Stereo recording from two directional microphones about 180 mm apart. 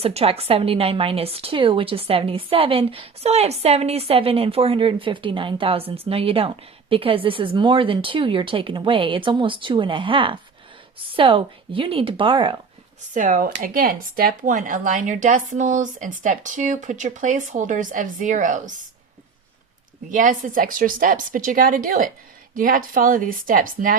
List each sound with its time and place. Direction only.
0.0 s a woman's voice: 35° right (ahead or behind)
13.1 s speech: 45° right (ahead or behind)
20.1 s speech: 45° right (ahead or behind)